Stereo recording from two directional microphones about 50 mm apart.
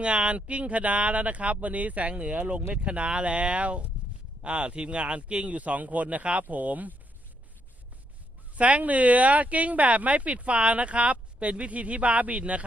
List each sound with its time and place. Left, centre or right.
0.0 s speech: right
8.5 s speech: right